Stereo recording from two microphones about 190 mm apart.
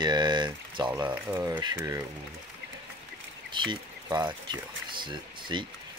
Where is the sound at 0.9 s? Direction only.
10° right (ahead or behind).